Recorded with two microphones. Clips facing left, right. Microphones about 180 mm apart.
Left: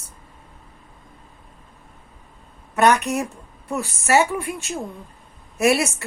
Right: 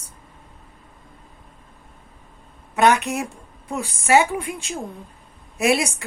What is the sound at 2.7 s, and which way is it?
A woman's voice, 15° right (ahead or behind).